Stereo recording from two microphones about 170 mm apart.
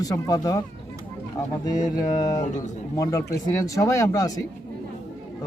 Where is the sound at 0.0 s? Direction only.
20° left (ahead or behind).